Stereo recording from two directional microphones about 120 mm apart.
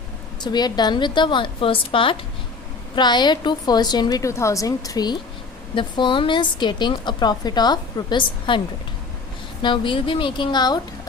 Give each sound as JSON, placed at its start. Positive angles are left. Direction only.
{"t": 0.4, "sound": "a woman's voice", "side_deg": 35}